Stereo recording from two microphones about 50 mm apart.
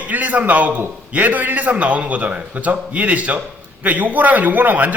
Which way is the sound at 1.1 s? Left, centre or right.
Right.